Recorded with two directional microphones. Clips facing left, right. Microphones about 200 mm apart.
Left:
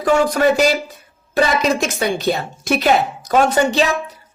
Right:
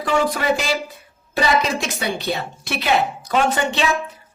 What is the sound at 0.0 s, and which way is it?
A woman's voice, 45° left (ahead or behind).